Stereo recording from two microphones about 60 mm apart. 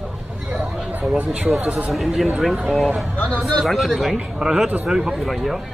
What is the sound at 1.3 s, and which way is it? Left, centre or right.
Speech, centre.